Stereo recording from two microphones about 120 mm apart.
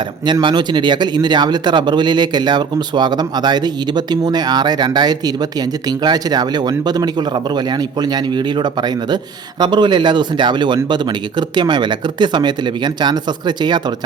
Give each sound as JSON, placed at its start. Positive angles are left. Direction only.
{"t": 0.4, "sound": "a man's voice", "side_deg": -40}